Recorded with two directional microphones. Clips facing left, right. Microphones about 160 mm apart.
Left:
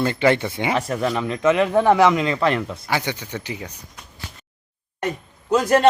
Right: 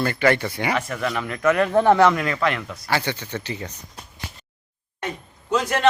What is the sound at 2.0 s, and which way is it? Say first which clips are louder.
Speech: left 1 dB; 20° left (ahead or behind).